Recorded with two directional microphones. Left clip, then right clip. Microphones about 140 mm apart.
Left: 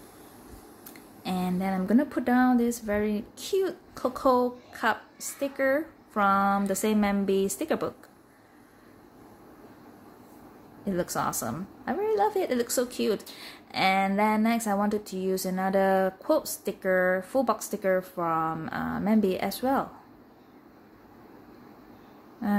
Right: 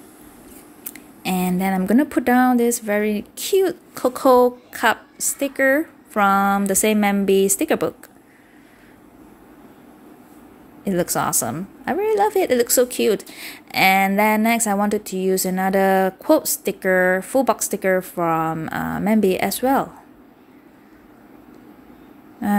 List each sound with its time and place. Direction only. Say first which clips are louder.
1.2 s a woman's voice: right 8 dB; 35° right (ahead or behind)
10.8 s a woman's voice: right 8 dB; 30° right (ahead or behind)